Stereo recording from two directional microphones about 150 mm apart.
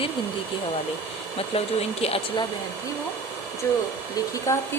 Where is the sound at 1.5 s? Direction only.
40° left (ahead or behind).